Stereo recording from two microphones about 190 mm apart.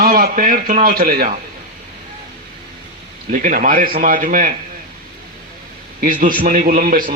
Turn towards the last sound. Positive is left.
turn(degrees=-45)  # may be behind; listen again after turning